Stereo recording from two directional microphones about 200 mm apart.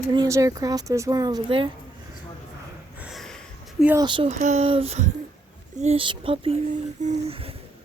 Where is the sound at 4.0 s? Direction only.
25° right (ahead or behind).